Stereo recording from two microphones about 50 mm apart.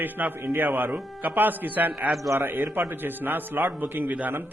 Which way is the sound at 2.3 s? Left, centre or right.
Right.